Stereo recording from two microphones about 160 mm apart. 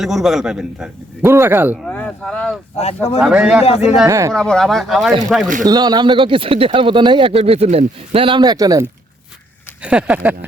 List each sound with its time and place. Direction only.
0.0 s a man's voice: centre (ahead or behind)
1.8 s speech: 10° left (ahead or behind)
2.7 s speech: 40° left (ahead or behind)
3.2 s a man's voice: 5° right (ahead or behind)
3.6 s speech: 40° left (ahead or behind)
4.0 s speech: 20° right (ahead or behind)
4.3 s a man's voice: 5° left (ahead or behind)
5.6 s speech: 25° right (ahead or behind)
9.8 s speech: 10° right (ahead or behind)